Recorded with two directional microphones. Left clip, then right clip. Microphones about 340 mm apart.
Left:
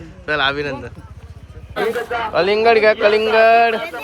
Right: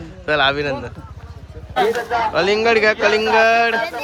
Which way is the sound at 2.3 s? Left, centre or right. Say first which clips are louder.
Left 4 dB; centre.